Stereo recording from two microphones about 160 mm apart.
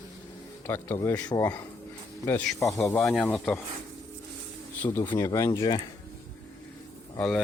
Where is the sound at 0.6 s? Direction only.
15° left (ahead or behind).